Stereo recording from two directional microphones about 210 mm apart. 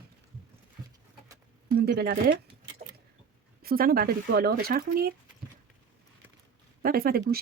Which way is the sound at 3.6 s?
45° right (ahead or behind).